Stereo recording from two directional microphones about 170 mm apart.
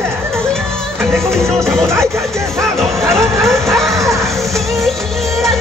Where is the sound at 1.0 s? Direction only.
Centre (ahead or behind).